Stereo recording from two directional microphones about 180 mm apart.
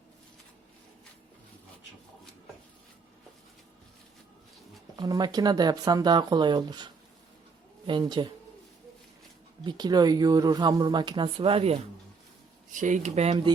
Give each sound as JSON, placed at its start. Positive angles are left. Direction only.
{"t": 4.9, "sound": "speech", "side_deg": -20}
{"t": 9.6, "sound": "speech", "side_deg": -25}
{"t": 12.7, "sound": "speech", "side_deg": -45}